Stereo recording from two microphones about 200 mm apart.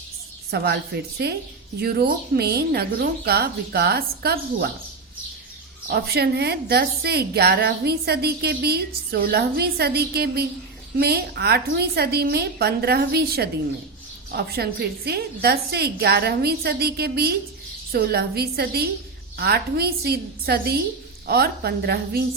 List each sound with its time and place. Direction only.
0.5 s a woman's voice: 55° right (ahead or behind)
5.9 s a woman's voice: 55° right (ahead or behind)